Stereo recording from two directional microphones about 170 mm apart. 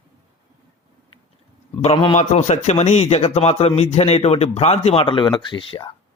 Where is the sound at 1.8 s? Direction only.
35° left (ahead or behind).